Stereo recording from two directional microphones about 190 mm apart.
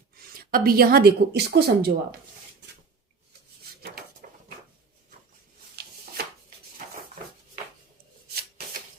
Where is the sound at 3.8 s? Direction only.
50° right (ahead or behind).